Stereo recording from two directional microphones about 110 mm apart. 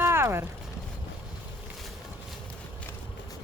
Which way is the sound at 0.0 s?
25° right (ahead or behind).